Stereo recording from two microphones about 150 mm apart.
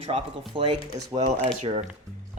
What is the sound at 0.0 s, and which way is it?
Speech, 40° right (ahead or behind).